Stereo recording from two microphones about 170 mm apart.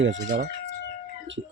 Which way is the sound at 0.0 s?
85° right.